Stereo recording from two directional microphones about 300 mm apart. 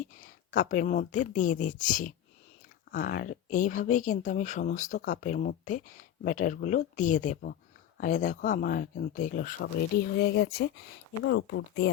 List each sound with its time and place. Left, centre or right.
0.0 s speech: left